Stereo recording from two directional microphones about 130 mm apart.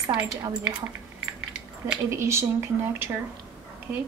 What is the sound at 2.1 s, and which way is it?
Speech, 20° right (ahead or behind).